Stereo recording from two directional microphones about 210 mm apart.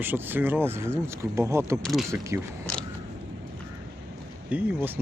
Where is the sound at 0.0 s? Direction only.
10° right (ahead or behind).